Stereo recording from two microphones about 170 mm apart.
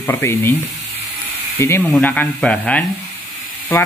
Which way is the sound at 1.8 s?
5° left (ahead or behind).